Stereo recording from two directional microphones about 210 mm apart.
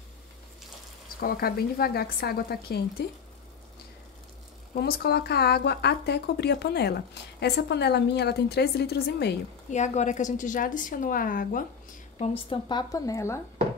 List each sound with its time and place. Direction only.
1.2 s speech: 45° left (ahead or behind)
4.7 s speech: 45° left (ahead or behind)
9.7 s a woman's voice: 35° left (ahead or behind)
12.2 s a woman's voice: 25° left (ahead or behind)